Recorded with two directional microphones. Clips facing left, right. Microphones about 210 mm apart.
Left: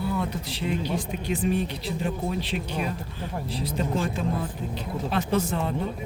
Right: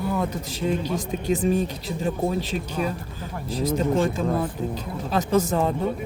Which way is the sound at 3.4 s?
45° right (ahead or behind).